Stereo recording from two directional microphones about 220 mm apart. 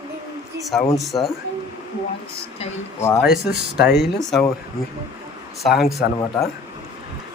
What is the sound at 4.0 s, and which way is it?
Speech, centre (ahead or behind).